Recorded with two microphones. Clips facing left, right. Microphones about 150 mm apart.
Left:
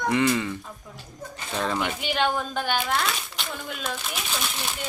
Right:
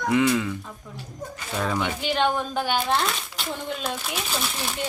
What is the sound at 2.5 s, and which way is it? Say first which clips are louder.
Speech: right 2 dB; 15° right (ahead or behind).